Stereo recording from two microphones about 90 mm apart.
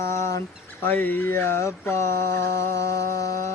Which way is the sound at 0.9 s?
20° left (ahead or behind).